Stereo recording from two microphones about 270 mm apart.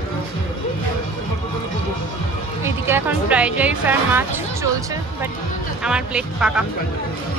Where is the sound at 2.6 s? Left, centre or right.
Centre.